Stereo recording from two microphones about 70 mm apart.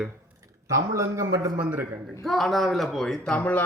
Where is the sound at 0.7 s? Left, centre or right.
Right.